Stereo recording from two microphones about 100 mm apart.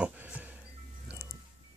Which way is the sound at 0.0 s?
15° right (ahead or behind).